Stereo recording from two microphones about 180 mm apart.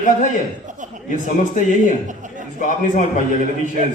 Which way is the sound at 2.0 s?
45° right (ahead or behind).